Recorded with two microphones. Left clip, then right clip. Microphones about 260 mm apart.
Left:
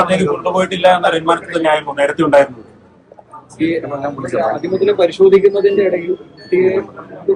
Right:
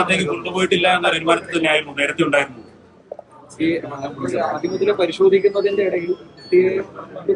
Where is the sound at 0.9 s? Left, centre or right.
Left.